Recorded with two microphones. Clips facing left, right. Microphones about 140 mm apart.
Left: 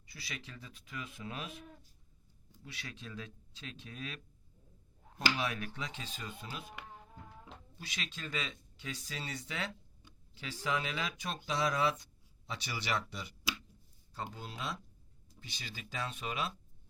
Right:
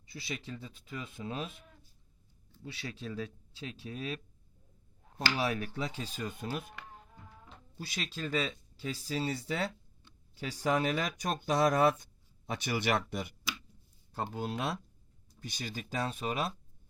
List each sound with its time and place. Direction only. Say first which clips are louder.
0.0 s speech: right 6 dB; 25° right (ahead or behind)
2.6 s speech: right 7 dB; 30° right (ahead or behind)
5.4 s speech: right 5 dB; 35° right (ahead or behind)
6.1 s speech: right 8 dB; 50° right (ahead or behind)
7.8 s speech: right 6 dB; 35° right (ahead or behind); by 13.3 s 55° right (ahead or behind)
14.3 s speech: right 10 dB; 60° right (ahead or behind)
15.4 s speech: right 8 dB; 45° right (ahead or behind)